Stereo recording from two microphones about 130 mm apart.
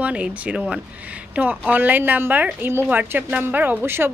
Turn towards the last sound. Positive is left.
turn(degrees=-15)  # may be behind; listen again after turning